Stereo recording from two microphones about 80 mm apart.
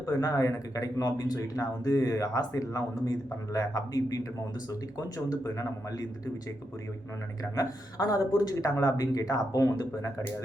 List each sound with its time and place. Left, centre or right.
0.2 s speech: left
7.5 s speech: left